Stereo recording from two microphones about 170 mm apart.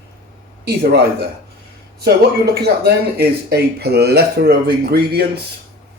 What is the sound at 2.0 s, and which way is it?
Speech, 70° right (ahead or behind).